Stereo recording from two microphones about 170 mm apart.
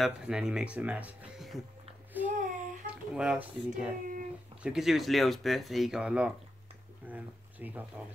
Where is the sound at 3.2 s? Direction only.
5° right (ahead or behind).